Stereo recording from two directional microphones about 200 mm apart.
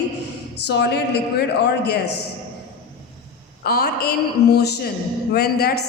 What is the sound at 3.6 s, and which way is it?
A woman's voice, 50° left (ahead or behind).